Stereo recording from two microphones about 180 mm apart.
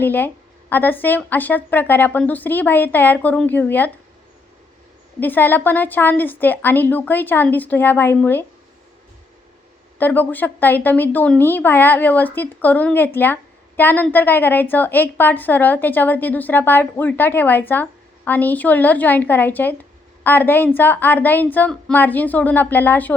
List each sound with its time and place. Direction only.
0.0 s speech: 10° left (ahead or behind)
5.2 s speech: 10° left (ahead or behind)
10.0 s speech: 10° left (ahead or behind)